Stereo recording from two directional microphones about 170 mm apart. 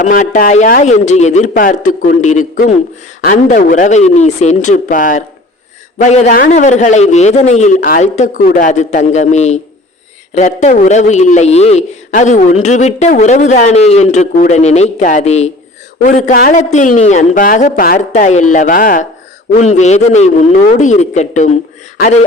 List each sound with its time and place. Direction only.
0.0 s a man's voice: 50° left (ahead or behind)
19.5 s a man's voice: 45° left (ahead or behind)